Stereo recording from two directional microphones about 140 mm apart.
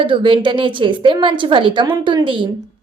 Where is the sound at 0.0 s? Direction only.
35° right (ahead or behind).